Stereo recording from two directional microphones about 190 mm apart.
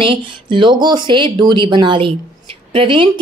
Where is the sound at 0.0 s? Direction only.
25° right (ahead or behind).